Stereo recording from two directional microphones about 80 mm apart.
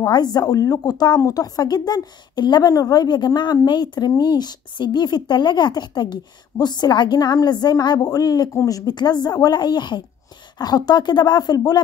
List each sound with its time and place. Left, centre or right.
0.0 s a woman's voice: left
2.7 s a woman's voice: left
10.6 s a woman's voice: left